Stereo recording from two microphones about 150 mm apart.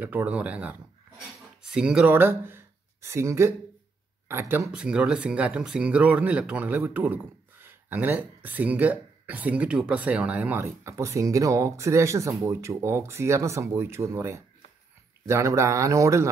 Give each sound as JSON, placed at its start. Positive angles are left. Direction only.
{"t": 0.0, "sound": "speech", "side_deg": -10}
{"t": 4.6, "sound": "speech", "side_deg": -5}